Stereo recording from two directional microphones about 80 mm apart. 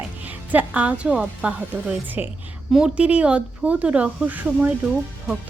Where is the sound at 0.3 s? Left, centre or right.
Centre.